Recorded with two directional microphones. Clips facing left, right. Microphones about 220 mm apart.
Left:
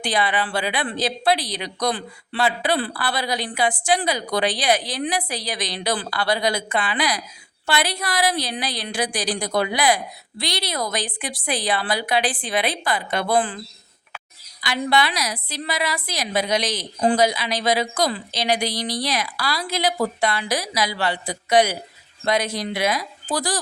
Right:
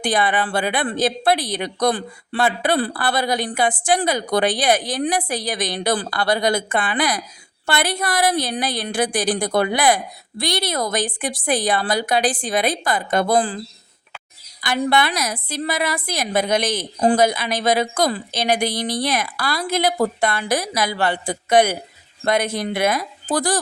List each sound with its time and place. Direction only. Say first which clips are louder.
0.0 s a woman's voice: right 3 dB; 50° right (ahead or behind)
14.6 s a woman's voice: right 2 dB; 50° right (ahead or behind)